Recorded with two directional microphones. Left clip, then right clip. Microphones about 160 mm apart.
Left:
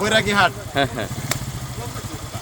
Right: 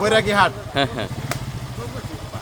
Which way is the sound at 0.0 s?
10° right (ahead or behind).